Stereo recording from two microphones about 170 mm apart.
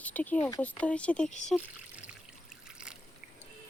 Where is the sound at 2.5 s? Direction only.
5° right (ahead or behind).